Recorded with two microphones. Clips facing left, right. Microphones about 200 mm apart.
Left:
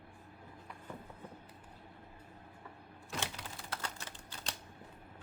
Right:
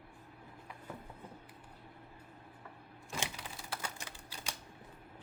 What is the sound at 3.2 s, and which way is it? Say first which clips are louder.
Typewriter: even; 10° right (ahead or behind).